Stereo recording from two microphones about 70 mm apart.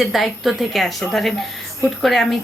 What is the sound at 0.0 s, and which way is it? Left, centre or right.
A woman's voice, centre.